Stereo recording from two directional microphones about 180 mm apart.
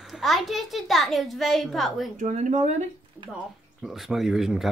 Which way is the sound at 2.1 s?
40° right (ahead or behind).